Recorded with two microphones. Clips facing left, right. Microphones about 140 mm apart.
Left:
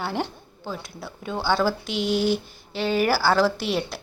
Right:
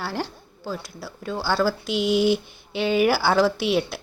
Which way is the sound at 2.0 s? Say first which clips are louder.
Right 3 dB; 45° left (ahead or behind).